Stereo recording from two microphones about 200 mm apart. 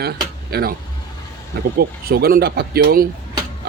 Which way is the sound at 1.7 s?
50° right (ahead or behind).